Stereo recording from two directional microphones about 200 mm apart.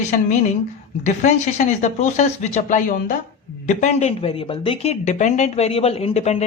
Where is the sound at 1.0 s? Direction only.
35° left (ahead or behind).